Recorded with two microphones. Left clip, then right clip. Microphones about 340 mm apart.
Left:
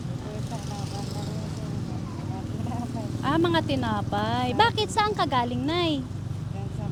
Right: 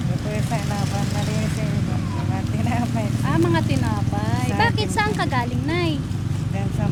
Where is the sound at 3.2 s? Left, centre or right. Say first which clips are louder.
Right 1 dB; left.